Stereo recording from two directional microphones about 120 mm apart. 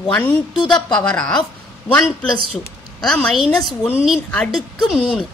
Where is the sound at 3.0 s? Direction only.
5° left (ahead or behind).